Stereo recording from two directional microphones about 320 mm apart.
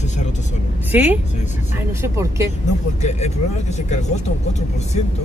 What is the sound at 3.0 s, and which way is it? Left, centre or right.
Speech, left.